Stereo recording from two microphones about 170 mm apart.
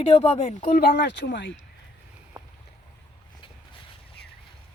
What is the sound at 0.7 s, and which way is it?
Speech, 70° left (ahead or behind).